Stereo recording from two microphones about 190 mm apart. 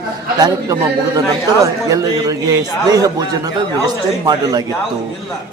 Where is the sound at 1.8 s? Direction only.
20° right (ahead or behind).